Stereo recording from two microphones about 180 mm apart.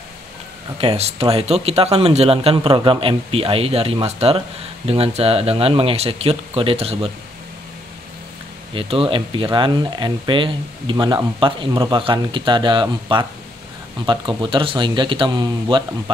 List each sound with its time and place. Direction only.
0.7 s a man's voice: 35° right (ahead or behind)
8.7 s speech: 30° right (ahead or behind)